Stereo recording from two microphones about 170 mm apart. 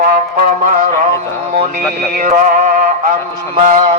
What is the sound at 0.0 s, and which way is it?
Music, 55° right (ahead or behind).